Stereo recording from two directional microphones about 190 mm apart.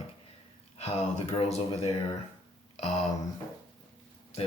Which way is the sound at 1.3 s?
35° left (ahead or behind).